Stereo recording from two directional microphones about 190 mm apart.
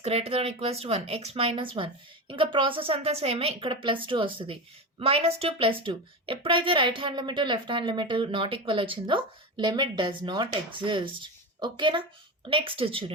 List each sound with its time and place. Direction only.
0.0 s speech: 30° right (ahead or behind)